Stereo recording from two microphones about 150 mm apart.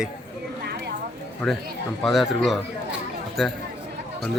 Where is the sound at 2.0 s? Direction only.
Centre (ahead or behind).